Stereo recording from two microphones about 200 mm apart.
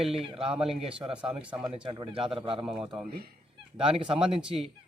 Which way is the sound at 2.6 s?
5° right (ahead or behind).